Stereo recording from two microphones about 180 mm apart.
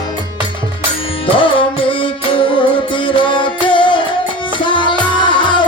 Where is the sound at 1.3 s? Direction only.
30° left (ahead or behind).